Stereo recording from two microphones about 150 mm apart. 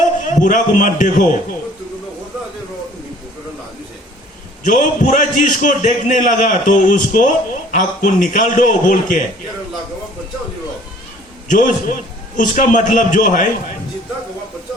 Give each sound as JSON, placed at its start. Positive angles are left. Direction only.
{"t": 0.0, "sound": "a man's voice", "side_deg": 60}
{"t": 4.6, "sound": "a man's voice", "side_deg": 60}
{"t": 11.5, "sound": "a man's voice", "side_deg": 60}